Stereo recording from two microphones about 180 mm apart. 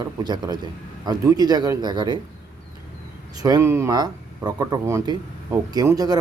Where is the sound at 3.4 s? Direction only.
20° right (ahead or behind).